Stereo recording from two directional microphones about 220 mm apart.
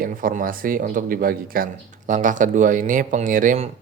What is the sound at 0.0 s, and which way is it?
Speech, 40° right (ahead or behind).